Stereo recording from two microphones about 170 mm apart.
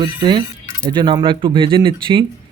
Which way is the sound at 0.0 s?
30° right (ahead or behind).